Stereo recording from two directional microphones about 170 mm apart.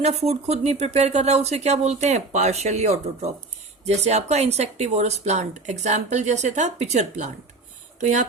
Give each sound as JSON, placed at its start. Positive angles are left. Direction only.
{"t": 0.0, "sound": "speech", "side_deg": -40}